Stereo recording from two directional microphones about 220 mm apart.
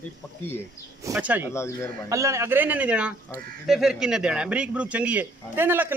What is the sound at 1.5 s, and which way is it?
Speech, 10° left (ahead or behind).